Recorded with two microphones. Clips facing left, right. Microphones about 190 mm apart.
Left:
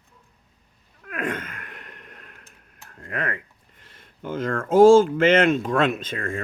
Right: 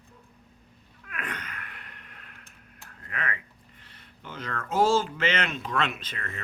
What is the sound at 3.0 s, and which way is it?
Speech, 45° left (ahead or behind).